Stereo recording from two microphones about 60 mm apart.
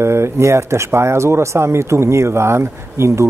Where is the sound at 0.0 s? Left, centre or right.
Right.